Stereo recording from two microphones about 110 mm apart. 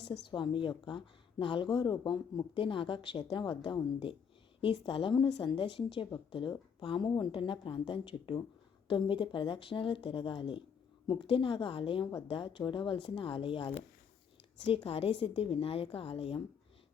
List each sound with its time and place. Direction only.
0.1 s a woman's voice: 45° left (ahead or behind)
2.6 s a woman's voice: 50° left (ahead or behind)